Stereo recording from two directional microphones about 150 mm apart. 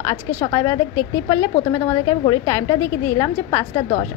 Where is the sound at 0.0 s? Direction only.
20° left (ahead or behind).